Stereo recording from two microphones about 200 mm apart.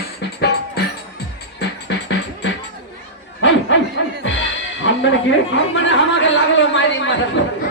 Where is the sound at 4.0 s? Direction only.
70° left (ahead or behind).